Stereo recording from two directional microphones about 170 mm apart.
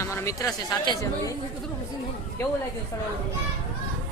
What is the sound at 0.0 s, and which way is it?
Speech, 15° left (ahead or behind).